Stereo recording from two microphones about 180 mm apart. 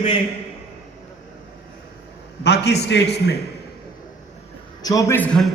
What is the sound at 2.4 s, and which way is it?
A man's voice, 70° left (ahead or behind).